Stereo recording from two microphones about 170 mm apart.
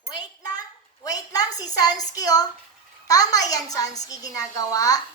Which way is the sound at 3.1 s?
20° left (ahead or behind).